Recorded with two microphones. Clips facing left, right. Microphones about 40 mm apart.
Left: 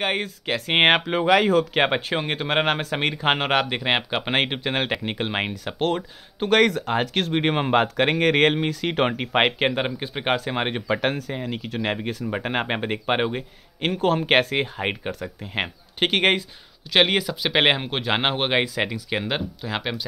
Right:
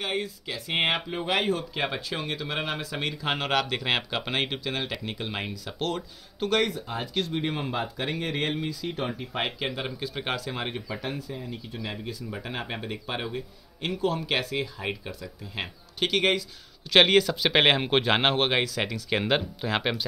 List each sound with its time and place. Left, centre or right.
0.0 s speech: left
1.0 s speech: left
1.8 s speech: left
4.4 s speech: left
6.6 s speech: left
10.9 s speech: left
16.9 s speech: centre
17.8 s speech: centre
18.1 s speech: centre
18.5 s speech: left
19.0 s speech: centre